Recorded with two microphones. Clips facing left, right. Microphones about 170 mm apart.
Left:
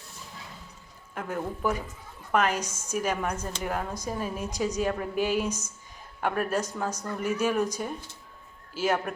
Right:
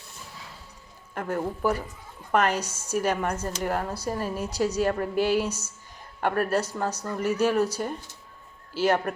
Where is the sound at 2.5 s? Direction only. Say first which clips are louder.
Right 3 dB; 10° right (ahead or behind).